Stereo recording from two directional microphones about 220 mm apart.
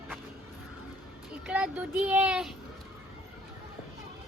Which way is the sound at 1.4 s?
5° right (ahead or behind).